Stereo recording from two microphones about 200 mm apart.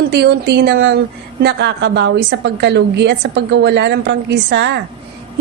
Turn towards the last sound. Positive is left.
turn(degrees=-60)  # may be behind; listen again after turning